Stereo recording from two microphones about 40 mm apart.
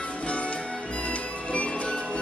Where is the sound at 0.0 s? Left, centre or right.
Left.